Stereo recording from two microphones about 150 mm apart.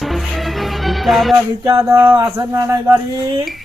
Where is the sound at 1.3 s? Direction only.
20° right (ahead or behind).